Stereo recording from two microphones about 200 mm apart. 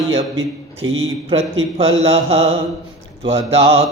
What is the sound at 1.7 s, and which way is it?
Mantra, 30° right (ahead or behind).